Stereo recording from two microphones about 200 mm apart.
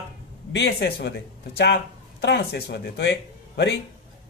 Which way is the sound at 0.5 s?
60° left (ahead or behind).